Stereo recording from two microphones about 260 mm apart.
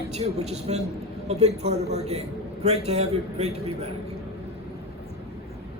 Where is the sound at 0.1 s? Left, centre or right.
Right.